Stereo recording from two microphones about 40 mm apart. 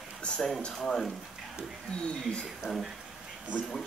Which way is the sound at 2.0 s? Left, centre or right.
Left.